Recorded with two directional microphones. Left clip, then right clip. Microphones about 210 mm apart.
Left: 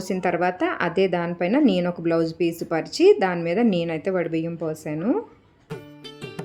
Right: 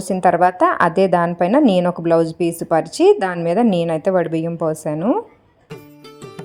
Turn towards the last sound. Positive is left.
turn(degrees=-25)  # may be behind; listen again after turning